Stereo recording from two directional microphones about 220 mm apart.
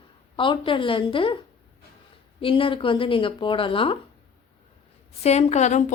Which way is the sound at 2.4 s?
25° left (ahead or behind).